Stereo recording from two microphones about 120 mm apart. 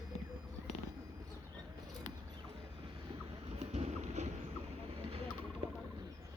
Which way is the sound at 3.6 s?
65° right (ahead or behind).